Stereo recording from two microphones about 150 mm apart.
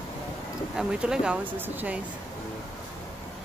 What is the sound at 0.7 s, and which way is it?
Speech, 5° right (ahead or behind).